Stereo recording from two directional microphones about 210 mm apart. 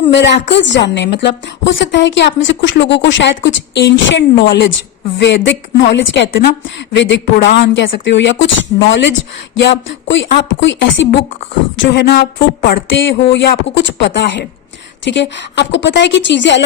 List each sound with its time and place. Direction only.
0.1 s a woman's voice: 60° left (ahead or behind)